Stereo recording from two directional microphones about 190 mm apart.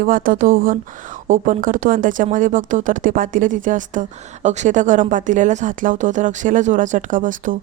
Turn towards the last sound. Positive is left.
turn(degrees=-45)  # may be behind; listen again after turning